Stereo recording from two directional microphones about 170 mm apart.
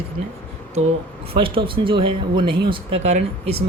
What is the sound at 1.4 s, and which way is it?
Speech, 30° right (ahead or behind).